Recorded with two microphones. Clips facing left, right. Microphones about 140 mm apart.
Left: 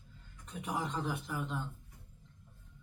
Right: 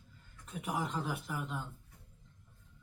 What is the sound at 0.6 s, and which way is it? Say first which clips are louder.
Speech: even; 5° right (ahead or behind).